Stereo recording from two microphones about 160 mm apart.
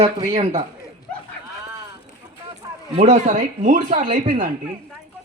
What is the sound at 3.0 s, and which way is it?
Speech, 50° right (ahead or behind).